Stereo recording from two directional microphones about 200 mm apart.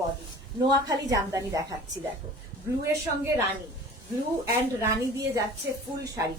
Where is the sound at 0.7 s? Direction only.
20° right (ahead or behind).